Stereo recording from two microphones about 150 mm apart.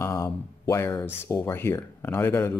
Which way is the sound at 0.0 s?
20° left (ahead or behind).